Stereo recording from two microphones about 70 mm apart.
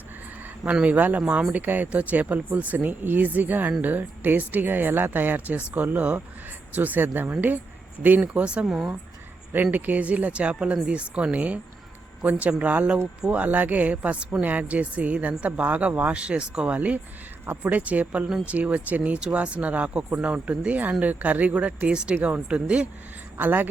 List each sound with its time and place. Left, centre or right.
0.6 s speech: centre
8.6 s speech: centre
9.7 s speech: right
23.4 s speech: right